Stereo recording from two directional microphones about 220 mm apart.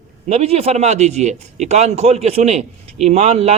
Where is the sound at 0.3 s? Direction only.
30° right (ahead or behind).